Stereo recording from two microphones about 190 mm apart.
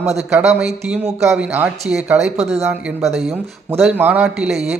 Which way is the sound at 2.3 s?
35° right (ahead or behind).